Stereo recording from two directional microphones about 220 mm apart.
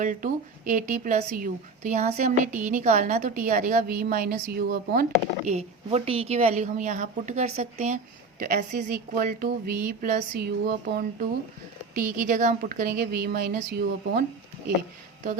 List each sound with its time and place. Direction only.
0.0 s a woman's voice: 35° right (ahead or behind)
5.5 s a woman's voice: 30° right (ahead or behind)